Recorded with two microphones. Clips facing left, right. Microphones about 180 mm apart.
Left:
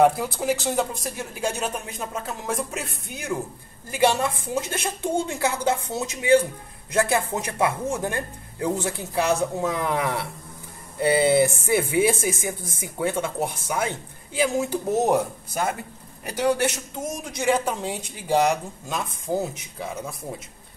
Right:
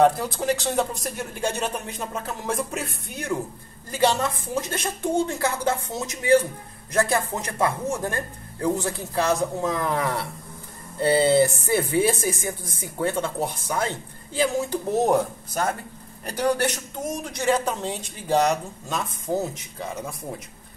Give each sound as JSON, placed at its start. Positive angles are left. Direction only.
{"t": 0.0, "sound": "speech", "side_deg": 10}
{"t": 3.9, "sound": "speech", "side_deg": 15}